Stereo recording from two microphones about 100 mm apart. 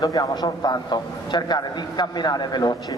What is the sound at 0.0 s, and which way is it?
A man's voice, 40° left (ahead or behind).